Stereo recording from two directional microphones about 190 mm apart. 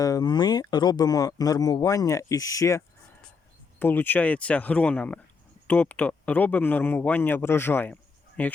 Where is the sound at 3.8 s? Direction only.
10° left (ahead or behind).